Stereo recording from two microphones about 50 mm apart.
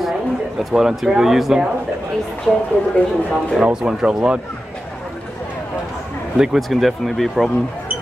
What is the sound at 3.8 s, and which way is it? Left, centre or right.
Speech, centre.